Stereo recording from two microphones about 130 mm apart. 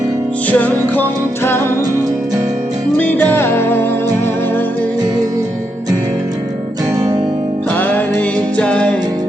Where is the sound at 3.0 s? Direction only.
15° left (ahead or behind).